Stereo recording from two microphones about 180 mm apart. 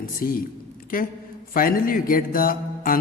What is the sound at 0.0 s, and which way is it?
Speech, 50° left (ahead or behind).